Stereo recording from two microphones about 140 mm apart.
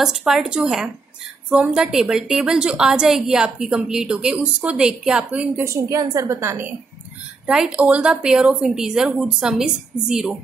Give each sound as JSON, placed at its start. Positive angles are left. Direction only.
{"t": 0.0, "sound": "a woman's voice", "side_deg": -5}
{"t": 5.7, "sound": "a woman's voice", "side_deg": -25}